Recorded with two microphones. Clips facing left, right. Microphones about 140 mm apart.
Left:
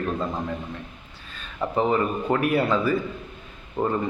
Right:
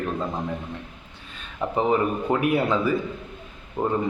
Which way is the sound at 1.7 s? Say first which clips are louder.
Right 1 dB; 15° right (ahead or behind).